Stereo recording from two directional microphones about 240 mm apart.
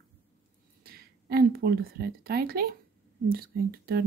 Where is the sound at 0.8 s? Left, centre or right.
Right.